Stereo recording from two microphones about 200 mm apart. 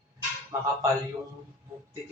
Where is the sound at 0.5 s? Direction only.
15° right (ahead or behind).